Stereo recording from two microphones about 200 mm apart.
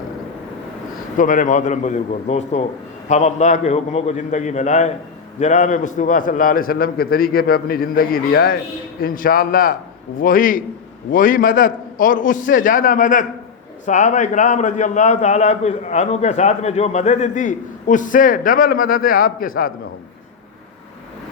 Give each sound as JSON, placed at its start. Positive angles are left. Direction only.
{"t": 1.1, "sound": "a man's voice", "side_deg": 40}